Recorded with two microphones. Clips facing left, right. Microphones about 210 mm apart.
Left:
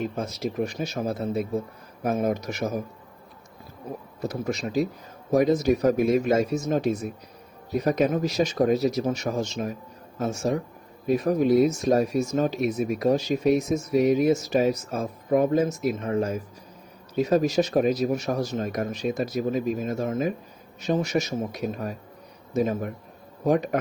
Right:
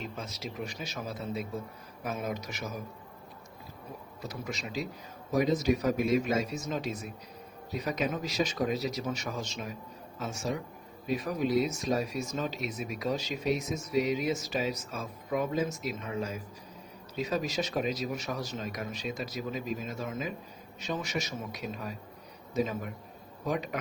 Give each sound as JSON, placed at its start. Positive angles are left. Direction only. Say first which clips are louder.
{"t": 0.0, "sound": "speech", "louder": "left 11 dB", "side_deg": 50}
{"t": 4.2, "sound": "speech", "louder": "left 10 dB", "side_deg": 45}